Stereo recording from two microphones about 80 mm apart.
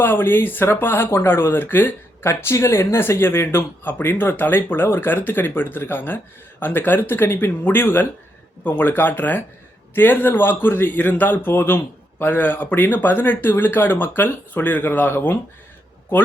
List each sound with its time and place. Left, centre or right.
0.0 s speech: left